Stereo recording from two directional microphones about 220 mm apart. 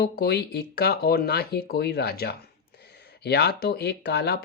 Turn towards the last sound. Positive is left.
turn(degrees=50)  # may be behind; listen again after turning